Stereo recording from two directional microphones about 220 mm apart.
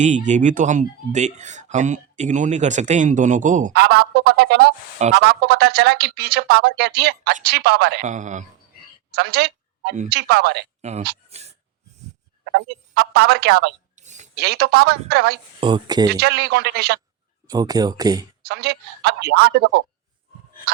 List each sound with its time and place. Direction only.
0.0 s speech: 35° right (ahead or behind)
3.7 s speech: 45° right (ahead or behind)
8.0 s speech: 35° right (ahead or behind)
9.1 s a sound: 45° right (ahead or behind)
10.1 s speech: 45° right (ahead or behind)
10.8 s speech: 30° right (ahead or behind)
11.3 s a sound: 30° right (ahead or behind)
12.5 s speech: 50° right (ahead or behind)
13.9 s a sound: 30° right (ahead or behind)
14.3 s speech: 50° right (ahead or behind)
15.6 s speech: 20° right (ahead or behind)
16.0 s speech: 45° right (ahead or behind)
17.5 s speech: 15° right (ahead or behind)
18.4 s speech: 45° right (ahead or behind)